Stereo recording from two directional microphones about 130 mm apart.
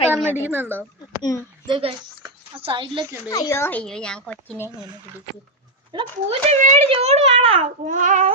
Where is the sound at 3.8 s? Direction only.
5° left (ahead or behind).